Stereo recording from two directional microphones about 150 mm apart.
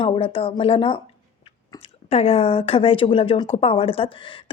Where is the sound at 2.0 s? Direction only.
45° left (ahead or behind).